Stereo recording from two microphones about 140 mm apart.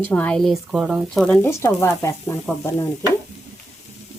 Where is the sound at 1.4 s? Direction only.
20° left (ahead or behind).